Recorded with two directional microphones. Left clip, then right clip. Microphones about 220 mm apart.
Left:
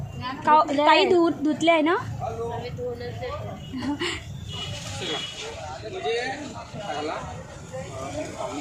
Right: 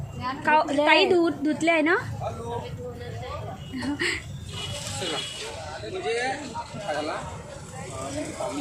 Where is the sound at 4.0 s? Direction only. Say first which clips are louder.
Right 4 dB; 15° left (ahead or behind).